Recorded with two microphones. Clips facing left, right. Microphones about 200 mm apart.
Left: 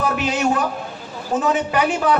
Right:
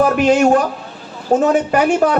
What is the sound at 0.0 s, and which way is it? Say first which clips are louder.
A man's voice: right 8 dB; 50° right (ahead or behind).